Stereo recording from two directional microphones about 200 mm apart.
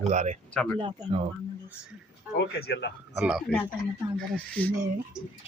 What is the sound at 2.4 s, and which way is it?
Speech, 60° left (ahead or behind).